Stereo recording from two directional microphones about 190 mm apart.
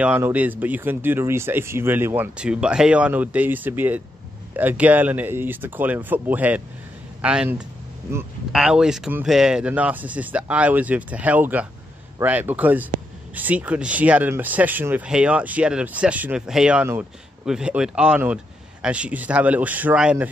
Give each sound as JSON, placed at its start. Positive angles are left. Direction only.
{"t": 0.0, "sound": "speech", "side_deg": -10}